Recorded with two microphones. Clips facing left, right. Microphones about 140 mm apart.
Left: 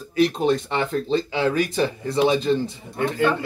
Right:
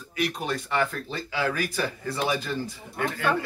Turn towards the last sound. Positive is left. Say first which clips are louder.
# left 7 dB
turn(degrees=25)  # may be behind; listen again after turning